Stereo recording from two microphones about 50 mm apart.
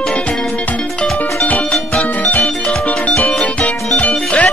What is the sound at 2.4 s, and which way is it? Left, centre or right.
Music, left.